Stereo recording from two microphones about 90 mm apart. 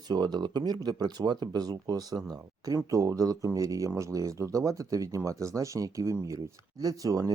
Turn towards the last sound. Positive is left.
turn(degrees=-40)  # may be behind; listen again after turning